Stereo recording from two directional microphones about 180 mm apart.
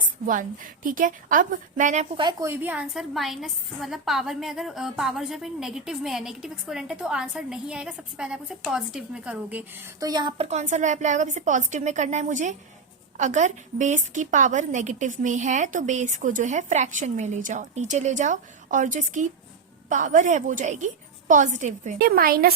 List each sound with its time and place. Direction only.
0.3 s a woman's voice: 50° right (ahead or behind)
2.1 s a woman's voice: 20° right (ahead or behind)
10.3 s a woman's voice: 40° right (ahead or behind); by 22.5 s 55° right (ahead or behind)